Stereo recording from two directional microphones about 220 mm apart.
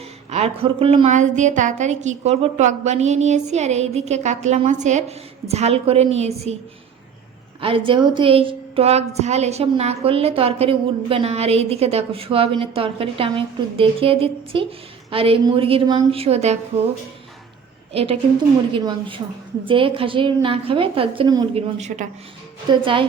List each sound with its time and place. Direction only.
0.3 s a woman's voice: 30° right (ahead or behind)
7.6 s a woman's voice: 25° right (ahead or behind)
17.9 s a woman's voice: 25° right (ahead or behind)
21.8 s a woman's voice: 35° right (ahead or behind)
22.7 s a woman's voice: 25° right (ahead or behind)